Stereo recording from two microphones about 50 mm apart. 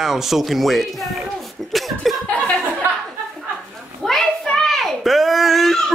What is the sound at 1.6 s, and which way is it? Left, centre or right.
Chuckle, centre.